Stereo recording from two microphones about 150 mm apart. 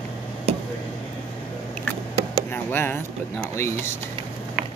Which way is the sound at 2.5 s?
15° left (ahead or behind).